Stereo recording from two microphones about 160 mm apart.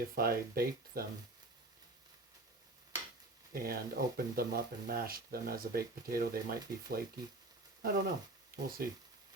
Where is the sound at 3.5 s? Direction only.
70° right (ahead or behind).